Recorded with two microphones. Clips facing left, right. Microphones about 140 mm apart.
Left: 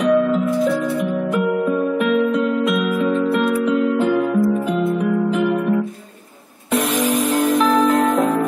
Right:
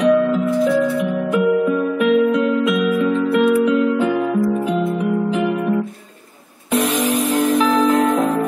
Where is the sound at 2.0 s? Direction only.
50° left (ahead or behind).